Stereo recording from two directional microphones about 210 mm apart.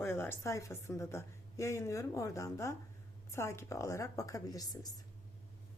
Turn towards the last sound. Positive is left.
turn(degrees=20)  # may be behind; listen again after turning